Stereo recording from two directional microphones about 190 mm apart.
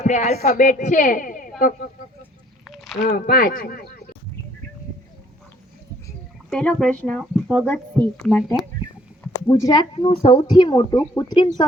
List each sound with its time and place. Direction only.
0.0 s a woman's voice: 40° left (ahead or behind)
2.6 s a sound: centre (ahead or behind)
3.1 s speech: 50° left (ahead or behind)
6.5 s speech: 5° left (ahead or behind)
9.5 s a woman's voice: 20° left (ahead or behind)